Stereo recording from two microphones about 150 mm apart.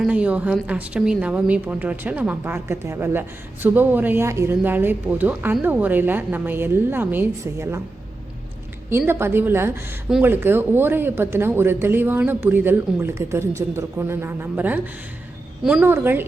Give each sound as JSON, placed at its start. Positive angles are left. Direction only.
{"t": 0.1, "sound": "a woman's voice", "side_deg": -10}
{"t": 8.9, "sound": "a woman's voice", "side_deg": -15}